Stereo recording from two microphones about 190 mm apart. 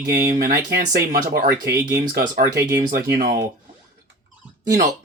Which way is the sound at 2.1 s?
50° right (ahead or behind).